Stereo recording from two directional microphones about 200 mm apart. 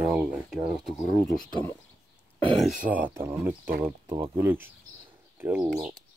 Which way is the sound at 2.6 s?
Centre (ahead or behind).